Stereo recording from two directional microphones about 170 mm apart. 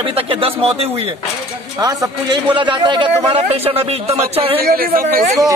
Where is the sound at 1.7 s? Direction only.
25° right (ahead or behind).